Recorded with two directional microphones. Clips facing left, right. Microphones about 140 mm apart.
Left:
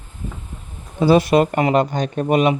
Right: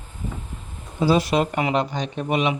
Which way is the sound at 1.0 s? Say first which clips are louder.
Left 5 dB; 60° left (ahead or behind).